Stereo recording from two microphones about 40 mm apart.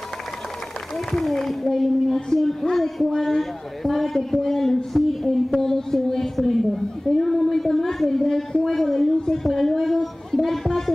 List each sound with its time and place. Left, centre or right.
0.9 s speech: centre